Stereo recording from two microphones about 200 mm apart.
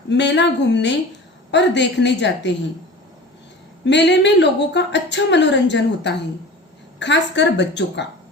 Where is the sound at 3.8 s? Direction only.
60° left (ahead or behind).